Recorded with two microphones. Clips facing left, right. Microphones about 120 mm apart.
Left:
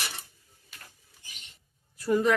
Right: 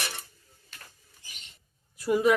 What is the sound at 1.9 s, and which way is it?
Speech, 10° right (ahead or behind).